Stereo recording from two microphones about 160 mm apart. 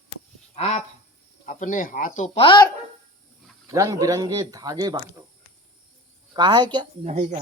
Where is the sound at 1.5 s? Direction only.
55° left (ahead or behind).